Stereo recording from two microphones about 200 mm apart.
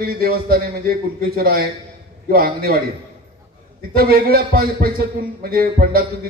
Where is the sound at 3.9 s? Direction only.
45° right (ahead or behind).